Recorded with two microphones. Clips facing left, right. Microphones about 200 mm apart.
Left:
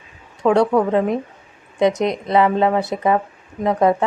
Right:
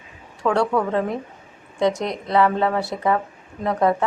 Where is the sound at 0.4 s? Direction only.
20° left (ahead or behind).